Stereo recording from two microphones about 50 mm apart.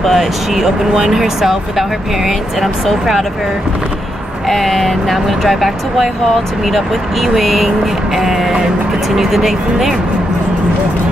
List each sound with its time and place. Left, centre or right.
0.0 s speech: centre
4.5 s speech: centre